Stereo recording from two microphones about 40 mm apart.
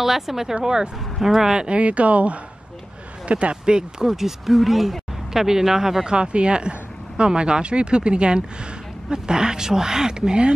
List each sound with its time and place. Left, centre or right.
0.0 s speech: centre
1.1 s speech: centre
1.5 s speech: right
4.1 s speech: centre
6.1 s speech: right